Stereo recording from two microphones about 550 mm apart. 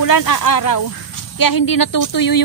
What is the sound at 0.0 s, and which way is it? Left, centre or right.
Speech, left.